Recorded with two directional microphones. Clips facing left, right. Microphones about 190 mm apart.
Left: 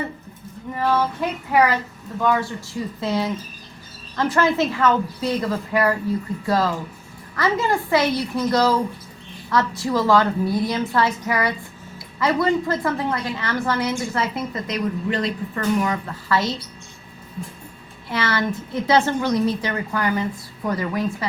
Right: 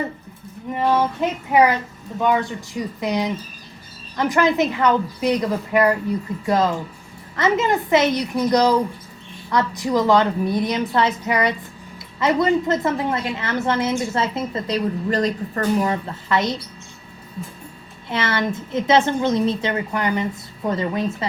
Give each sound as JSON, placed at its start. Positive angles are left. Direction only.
{"t": 0.7, "sound": "a child's voice", "side_deg": -20}
{"t": 18.1, "sound": "a child's voice", "side_deg": -25}